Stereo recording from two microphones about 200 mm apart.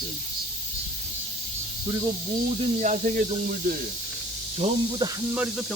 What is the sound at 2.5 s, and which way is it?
Speech, 40° right (ahead or behind).